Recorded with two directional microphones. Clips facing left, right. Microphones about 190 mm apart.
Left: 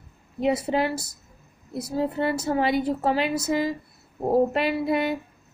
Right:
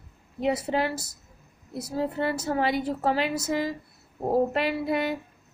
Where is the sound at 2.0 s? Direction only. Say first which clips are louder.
Left 2 dB; 15° left (ahead or behind).